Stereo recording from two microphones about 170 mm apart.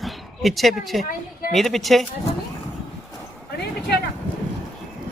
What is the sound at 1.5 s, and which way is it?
Speech, centre (ahead or behind).